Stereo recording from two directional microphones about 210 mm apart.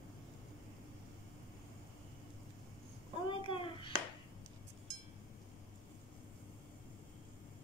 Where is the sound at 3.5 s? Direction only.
25° left (ahead or behind).